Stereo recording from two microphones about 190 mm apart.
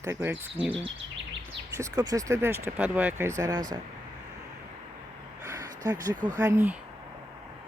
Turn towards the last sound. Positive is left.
turn(degrees=-10)  # may be behind; listen again after turning